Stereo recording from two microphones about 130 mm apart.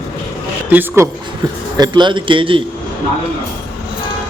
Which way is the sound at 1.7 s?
35° right (ahead or behind).